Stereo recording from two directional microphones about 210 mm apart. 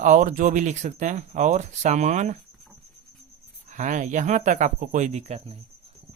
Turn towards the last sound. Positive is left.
turn(degrees=-30)  # may be behind; listen again after turning